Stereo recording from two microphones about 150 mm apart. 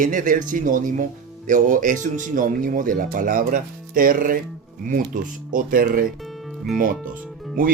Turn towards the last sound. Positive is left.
turn(degrees=-65)  # may be behind; listen again after turning